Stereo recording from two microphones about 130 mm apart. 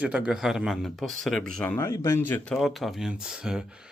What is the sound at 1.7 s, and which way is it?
Speech, 20° left (ahead or behind).